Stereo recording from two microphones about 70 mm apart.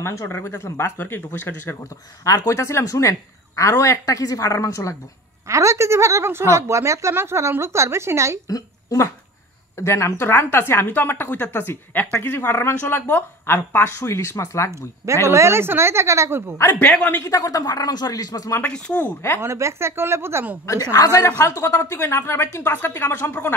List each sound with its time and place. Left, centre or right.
0.0 s a woman's voice: left
0.3 s a woman's voice: left
2.2 s a woman's voice: left
5.5 s speech: right
8.5 s a woman's voice: left
9.8 s a woman's voice: left
10.2 s a woman's voice: left
14.7 s a woman's voice: right
17.3 s speech: left
18.6 s a woman's voice: centre
19.4 s a woman's voice: right
20.6 s speech: left
21.4 s a woman's voice: left